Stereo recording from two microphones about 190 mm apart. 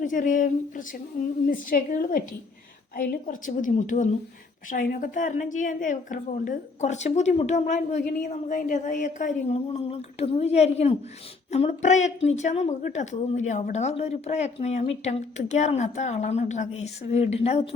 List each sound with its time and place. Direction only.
0.0 s a woman's voice: 45° left (ahead or behind)